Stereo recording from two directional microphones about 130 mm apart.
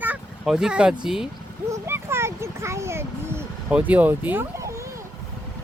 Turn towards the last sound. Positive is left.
turn(degrees=-25)  # may be behind; listen again after turning